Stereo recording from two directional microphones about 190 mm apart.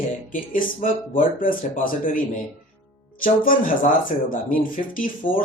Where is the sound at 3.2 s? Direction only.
45° left (ahead or behind).